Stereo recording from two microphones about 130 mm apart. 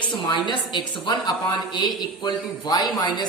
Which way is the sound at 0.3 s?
35° left (ahead or behind).